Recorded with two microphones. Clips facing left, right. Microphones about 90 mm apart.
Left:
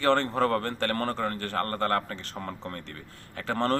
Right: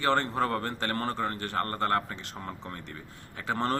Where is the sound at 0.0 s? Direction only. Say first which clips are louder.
Left 3 dB; 15° right (ahead or behind).